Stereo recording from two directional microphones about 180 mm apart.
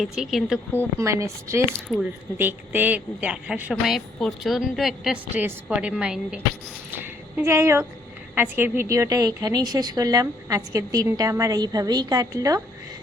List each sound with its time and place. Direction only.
0.0 s a woman's voice: centre (ahead or behind)
0.9 s speech: 15° right (ahead or behind)
1.9 s a woman's voice: centre (ahead or behind)
2.4 s a woman's voice: 10° right (ahead or behind)